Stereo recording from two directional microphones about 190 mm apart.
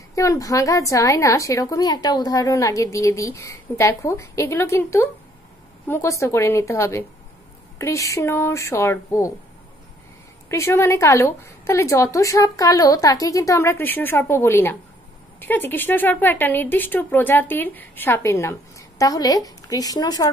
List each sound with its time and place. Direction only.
0.1 s a woman's voice: 15° left (ahead or behind)
10.5 s a woman's voice: 15° left (ahead or behind)